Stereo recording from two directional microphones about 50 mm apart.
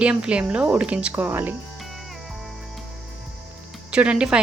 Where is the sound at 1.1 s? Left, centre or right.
Right.